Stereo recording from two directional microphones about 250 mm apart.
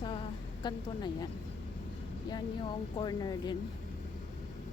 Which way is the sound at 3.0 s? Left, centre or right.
Centre.